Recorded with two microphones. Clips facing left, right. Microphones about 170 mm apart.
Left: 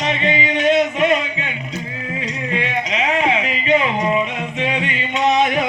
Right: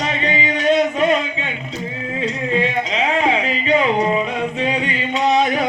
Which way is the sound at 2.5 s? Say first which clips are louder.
Right 2 dB; 35° right (ahead or behind).